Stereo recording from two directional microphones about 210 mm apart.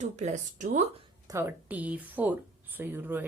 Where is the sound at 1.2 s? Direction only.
10° right (ahead or behind).